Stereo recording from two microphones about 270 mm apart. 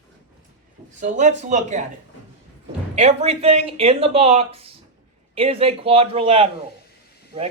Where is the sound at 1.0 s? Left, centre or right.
Right.